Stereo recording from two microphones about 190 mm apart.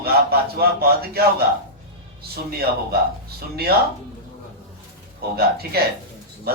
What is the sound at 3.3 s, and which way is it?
Speech, 55° right (ahead or behind).